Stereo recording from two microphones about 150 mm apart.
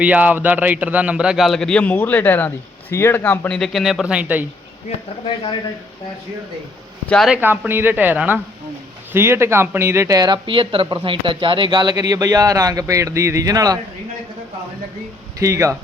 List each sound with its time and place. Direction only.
0.0 s a man's voice: 10° right (ahead or behind); by 3.6 s 15° left (ahead or behind)
3.6 s speech: centre (ahead or behind)
7.1 s speech: centre (ahead or behind)
7.4 s a man's voice: 15° right (ahead or behind)
15.4 s speech: 20° right (ahead or behind)